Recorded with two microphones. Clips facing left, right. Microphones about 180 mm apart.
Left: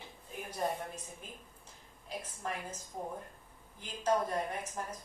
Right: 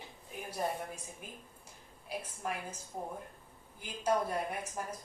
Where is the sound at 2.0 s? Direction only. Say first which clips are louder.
Right 1 dB; 10° right (ahead or behind).